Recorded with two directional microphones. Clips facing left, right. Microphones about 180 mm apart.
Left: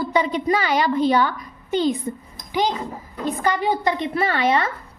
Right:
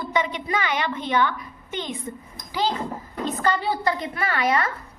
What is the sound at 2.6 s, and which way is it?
A woman's voice, 20° left (ahead or behind).